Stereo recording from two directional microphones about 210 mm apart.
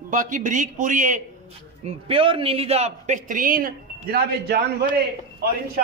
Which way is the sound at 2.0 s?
25° right (ahead or behind).